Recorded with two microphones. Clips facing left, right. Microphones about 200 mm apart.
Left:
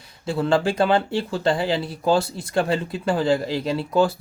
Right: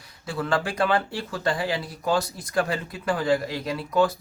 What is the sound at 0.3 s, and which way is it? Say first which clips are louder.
Speech: left 6 dB; 25° left (ahead or behind).